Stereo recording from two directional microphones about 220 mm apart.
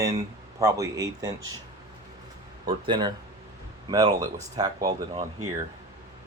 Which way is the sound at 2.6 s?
20° right (ahead or behind).